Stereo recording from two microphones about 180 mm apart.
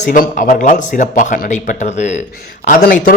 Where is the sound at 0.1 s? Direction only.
50° left (ahead or behind).